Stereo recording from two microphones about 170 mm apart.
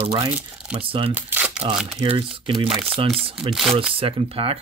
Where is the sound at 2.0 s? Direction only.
30° right (ahead or behind).